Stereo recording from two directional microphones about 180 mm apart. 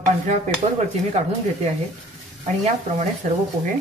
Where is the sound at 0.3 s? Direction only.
40° right (ahead or behind).